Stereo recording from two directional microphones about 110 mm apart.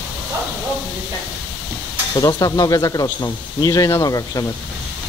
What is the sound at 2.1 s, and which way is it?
Speech, 35° left (ahead or behind).